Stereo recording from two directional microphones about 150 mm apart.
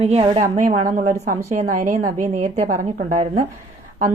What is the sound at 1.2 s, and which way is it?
A woman's voice, 60° right (ahead or behind).